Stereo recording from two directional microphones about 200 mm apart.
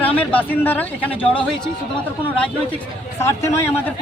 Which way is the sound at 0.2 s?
10° left (ahead or behind).